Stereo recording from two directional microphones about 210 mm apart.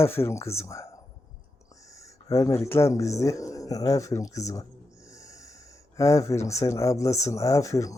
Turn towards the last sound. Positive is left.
turn(degrees=15)  # may be behind; listen again after turning